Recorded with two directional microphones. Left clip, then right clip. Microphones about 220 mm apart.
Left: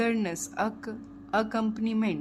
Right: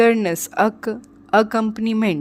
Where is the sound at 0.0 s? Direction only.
40° right (ahead or behind).